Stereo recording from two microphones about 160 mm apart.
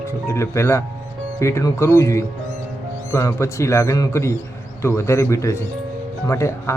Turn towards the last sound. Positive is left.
turn(degrees=20)  # may be behind; listen again after turning